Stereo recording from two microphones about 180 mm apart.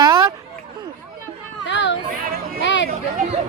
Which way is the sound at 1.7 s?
90° left.